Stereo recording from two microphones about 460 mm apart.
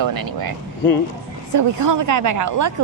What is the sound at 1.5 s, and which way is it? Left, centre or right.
A woman's voice, right.